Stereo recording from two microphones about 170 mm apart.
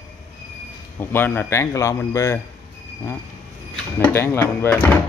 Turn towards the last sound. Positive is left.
turn(degrees=15)  # may be behind; listen again after turning